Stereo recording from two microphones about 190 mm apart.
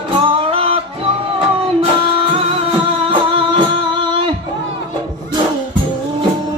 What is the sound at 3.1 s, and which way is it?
Music, 25° right (ahead or behind).